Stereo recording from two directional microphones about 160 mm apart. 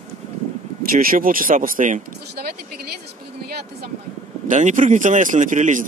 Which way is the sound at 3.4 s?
75° right (ahead or behind).